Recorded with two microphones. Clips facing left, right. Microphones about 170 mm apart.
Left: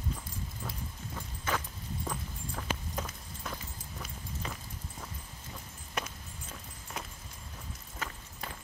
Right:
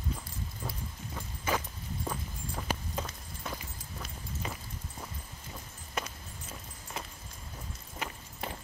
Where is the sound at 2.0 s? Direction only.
5° right (ahead or behind).